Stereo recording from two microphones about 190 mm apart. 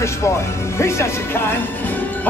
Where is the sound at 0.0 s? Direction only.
15° left (ahead or behind).